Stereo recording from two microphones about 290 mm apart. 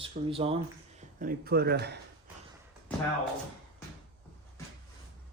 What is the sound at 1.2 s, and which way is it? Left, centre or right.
Speech, right.